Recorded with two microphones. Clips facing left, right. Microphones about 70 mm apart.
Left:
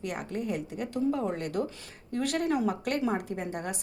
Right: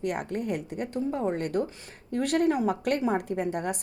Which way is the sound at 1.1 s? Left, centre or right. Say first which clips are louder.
Right 3 dB; right.